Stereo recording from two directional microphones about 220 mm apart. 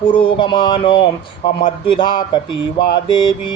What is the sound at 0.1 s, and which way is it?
Speech, 25° left (ahead or behind).